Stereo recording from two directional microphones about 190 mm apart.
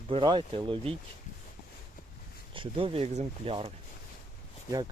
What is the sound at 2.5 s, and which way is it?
Speech, 25° right (ahead or behind).